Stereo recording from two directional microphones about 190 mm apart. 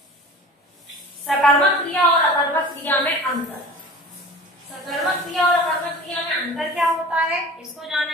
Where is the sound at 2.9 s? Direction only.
10° left (ahead or behind).